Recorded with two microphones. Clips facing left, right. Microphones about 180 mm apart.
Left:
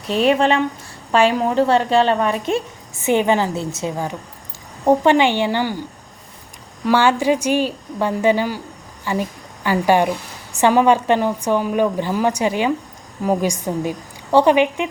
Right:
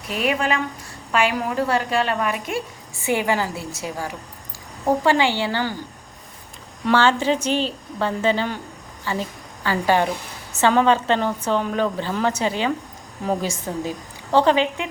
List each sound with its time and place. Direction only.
0.1 s a woman's voice: 30° left (ahead or behind)
6.8 s a woman's voice: 10° left (ahead or behind)